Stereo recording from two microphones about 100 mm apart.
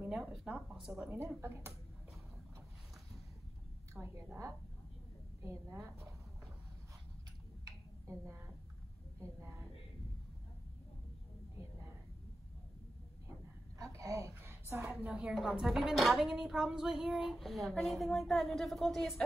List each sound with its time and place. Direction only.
0.1 s speech: 5° right (ahead or behind)
1.4 s speech: 25° right (ahead or behind)
3.9 s a woman's voice: 30° right (ahead or behind)
5.4 s a sound: 25° right (ahead or behind)
7.6 s tick-tock: 30° right (ahead or behind)
9.2 s a woman's voice: 25° right (ahead or behind)
13.7 s a sound: 35° right (ahead or behind)
15.0 s speech: 10° right (ahead or behind)